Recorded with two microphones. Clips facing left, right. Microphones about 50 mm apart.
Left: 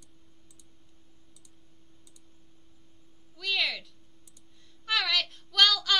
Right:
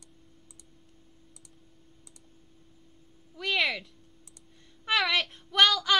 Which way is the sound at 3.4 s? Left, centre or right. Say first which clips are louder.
Right 2 dB; right.